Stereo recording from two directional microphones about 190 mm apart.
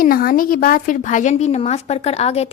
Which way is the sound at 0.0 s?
50° left (ahead or behind).